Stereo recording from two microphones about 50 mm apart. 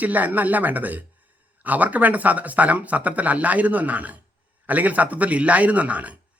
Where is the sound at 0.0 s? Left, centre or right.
Right.